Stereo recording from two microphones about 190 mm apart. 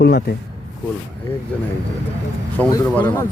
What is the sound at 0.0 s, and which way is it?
Speech, 55° left (ahead or behind).